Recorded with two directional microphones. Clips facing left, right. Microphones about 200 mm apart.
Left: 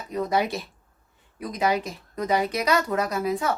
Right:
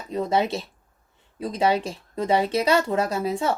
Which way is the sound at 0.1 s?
25° right (ahead or behind).